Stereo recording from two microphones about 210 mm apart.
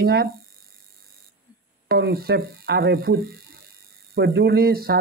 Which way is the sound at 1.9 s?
45° right (ahead or behind).